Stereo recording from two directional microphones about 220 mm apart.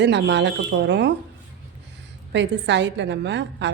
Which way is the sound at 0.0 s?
50° right (ahead or behind).